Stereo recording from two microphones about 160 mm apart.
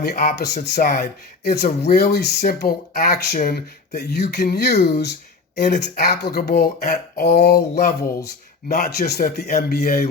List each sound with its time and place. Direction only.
0.0 s speech: 75° left (ahead or behind)
0.3 s speech: 90° left; by 10.1 s 70° left (ahead or behind)